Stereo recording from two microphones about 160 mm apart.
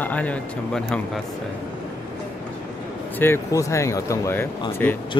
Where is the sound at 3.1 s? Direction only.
15° left (ahead or behind).